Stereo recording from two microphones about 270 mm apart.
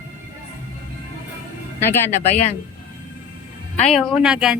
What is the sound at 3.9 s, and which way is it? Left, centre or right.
Speech, centre.